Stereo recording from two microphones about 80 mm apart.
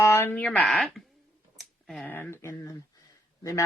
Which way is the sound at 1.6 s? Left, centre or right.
Centre.